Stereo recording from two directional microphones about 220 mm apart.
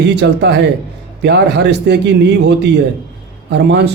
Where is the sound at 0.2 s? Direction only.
50° right (ahead or behind).